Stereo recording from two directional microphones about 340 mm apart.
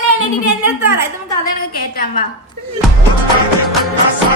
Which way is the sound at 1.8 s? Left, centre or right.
Left.